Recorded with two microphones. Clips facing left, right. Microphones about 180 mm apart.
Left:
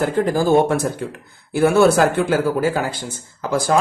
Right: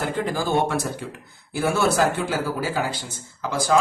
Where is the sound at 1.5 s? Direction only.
60° left (ahead or behind).